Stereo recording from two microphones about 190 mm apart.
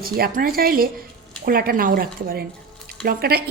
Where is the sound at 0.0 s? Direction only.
50° right (ahead or behind).